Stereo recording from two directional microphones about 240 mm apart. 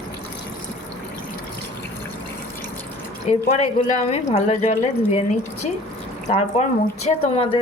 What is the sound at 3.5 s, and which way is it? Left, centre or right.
Speech, left.